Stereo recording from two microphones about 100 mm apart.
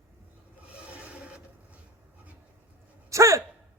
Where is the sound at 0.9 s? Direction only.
15° right (ahead or behind).